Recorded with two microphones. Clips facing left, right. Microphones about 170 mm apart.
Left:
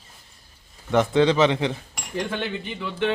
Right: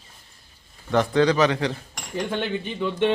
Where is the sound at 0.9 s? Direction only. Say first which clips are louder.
Left 1 dB; 20° left (ahead or behind).